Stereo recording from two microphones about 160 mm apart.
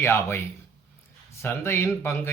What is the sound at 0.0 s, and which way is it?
Speech, 15° left (ahead or behind).